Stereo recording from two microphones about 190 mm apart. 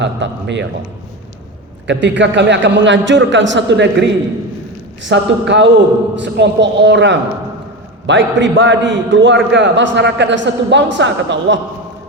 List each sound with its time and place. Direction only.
0.0 s a man's voice: 70° right (ahead or behind)
1.9 s a man's voice: 70° right (ahead or behind)